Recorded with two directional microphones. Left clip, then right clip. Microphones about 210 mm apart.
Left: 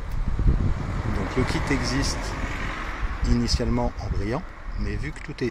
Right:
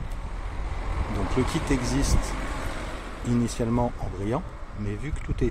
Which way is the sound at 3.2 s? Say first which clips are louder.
Left 1 dB; 5° right (ahead or behind).